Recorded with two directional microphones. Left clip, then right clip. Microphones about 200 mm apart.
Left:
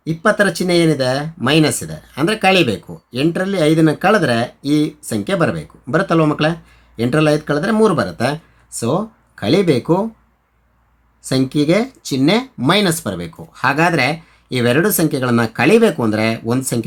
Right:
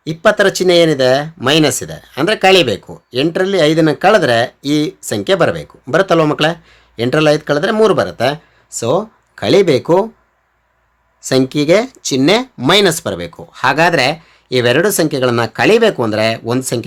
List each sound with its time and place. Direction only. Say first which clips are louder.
0.0 s speech: right 4 dB; 30° right (ahead or behind)
11.2 s speech: right 4 dB; 25° right (ahead or behind)